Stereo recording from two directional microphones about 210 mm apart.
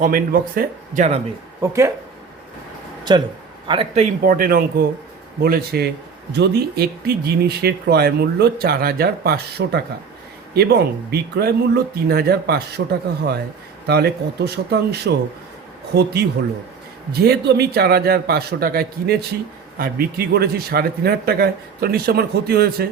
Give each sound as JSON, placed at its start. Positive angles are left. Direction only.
{"t": 0.0, "sound": "a man's voice", "side_deg": -40}
{"t": 1.6, "sound": "speech", "side_deg": -15}
{"t": 3.0, "sound": "a man's voice", "side_deg": -20}
{"t": 4.2, "sound": "a man's voice", "side_deg": -40}